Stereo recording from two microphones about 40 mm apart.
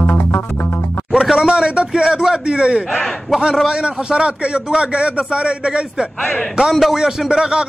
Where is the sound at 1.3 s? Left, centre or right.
Centre.